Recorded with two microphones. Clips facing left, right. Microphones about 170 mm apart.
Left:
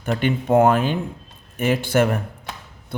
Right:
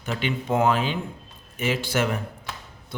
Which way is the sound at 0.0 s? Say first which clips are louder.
Left 6 dB; 50° left (ahead or behind).